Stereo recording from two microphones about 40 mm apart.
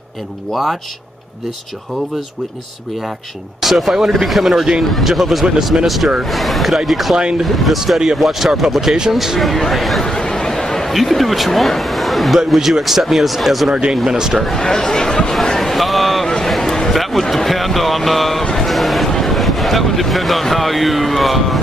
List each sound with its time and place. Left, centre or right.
3.6 s speech: centre
7.2 s speech: right
7.4 s speech: centre
10.0 s a sound: centre
10.9 s speech: centre
13.7 s speech: right
14.6 s speech: centre
15.5 s a sound: centre
15.8 s a sound: centre
19.0 s speech: centre